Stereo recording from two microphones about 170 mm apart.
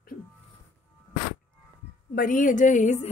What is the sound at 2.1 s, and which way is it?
Speech, 50° left (ahead or behind).